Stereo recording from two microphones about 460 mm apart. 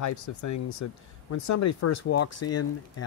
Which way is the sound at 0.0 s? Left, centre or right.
Left.